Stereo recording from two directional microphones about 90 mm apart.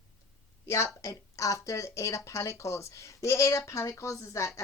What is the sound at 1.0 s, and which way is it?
Speech, 35° left (ahead or behind).